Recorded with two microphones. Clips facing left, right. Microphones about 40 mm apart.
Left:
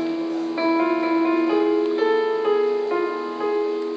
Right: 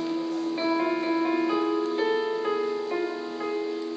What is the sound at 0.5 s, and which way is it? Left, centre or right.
Music, left.